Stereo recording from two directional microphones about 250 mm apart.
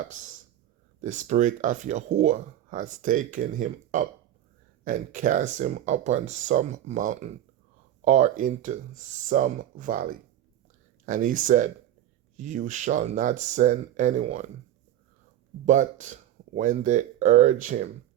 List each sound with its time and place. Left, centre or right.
0.0 s speech: right
15.6 s speech: right